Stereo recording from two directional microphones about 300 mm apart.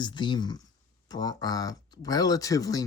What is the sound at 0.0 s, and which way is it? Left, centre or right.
Speech, centre.